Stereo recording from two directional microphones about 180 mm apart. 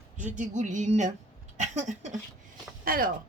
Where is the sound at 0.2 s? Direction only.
45° right (ahead or behind).